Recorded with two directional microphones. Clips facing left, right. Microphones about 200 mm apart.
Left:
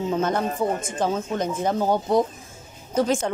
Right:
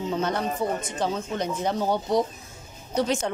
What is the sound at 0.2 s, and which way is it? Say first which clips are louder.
Speech: left 3 dB; 50° left (ahead or behind).